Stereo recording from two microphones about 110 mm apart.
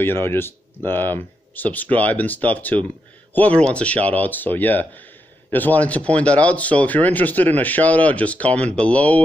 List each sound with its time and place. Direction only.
0.0 s speech: 20° left (ahead or behind)